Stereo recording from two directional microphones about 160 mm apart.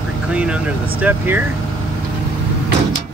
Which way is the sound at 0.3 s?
5° right (ahead or behind).